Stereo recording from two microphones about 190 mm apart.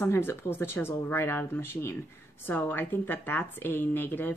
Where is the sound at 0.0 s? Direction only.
10° left (ahead or behind).